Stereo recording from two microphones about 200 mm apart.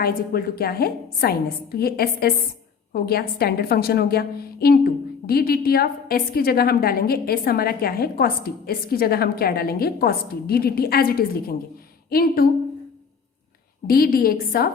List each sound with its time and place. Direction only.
0.0 s a woman's voice: 45° left (ahead or behind)
13.8 s a woman's voice: 50° left (ahead or behind)